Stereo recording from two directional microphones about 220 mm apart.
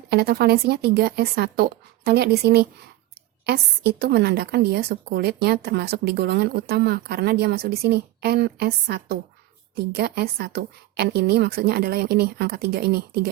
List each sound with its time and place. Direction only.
0.1 s a woman's voice: 45° right (ahead or behind)